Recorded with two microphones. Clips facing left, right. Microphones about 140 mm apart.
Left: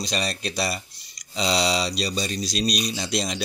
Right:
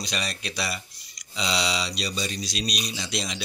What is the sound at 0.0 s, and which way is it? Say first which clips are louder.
Speech: left 5 dB; 35° left (ahead or behind).